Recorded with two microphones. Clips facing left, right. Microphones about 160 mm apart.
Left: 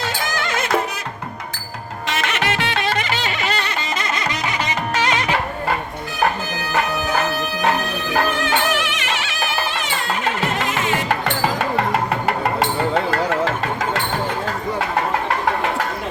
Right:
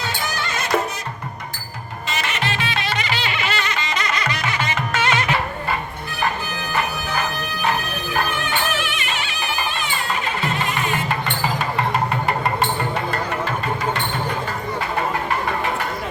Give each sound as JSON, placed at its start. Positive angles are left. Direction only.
{"t": 0.3, "sound": "music", "side_deg": 90}
{"t": 2.0, "sound": "music", "side_deg": 70}
{"t": 3.9, "sound": "music", "side_deg": 25}
{"t": 8.4, "sound": "music", "side_deg": 90}